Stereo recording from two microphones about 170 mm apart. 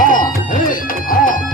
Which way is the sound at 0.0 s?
50° left (ahead or behind).